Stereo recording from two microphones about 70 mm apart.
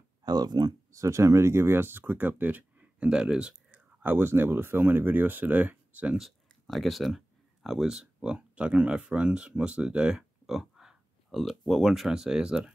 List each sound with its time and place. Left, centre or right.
0.2 s speech: right
0.9 s speech: right; by 3.8 s centre
4.0 s speech: right
6.1 s speech: centre